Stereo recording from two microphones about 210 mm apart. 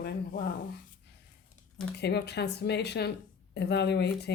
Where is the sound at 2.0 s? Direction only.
50° left (ahead or behind).